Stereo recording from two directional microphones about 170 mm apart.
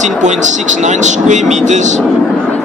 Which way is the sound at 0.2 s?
45° right (ahead or behind).